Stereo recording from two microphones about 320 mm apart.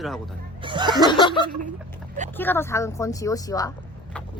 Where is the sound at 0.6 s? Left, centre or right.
Centre.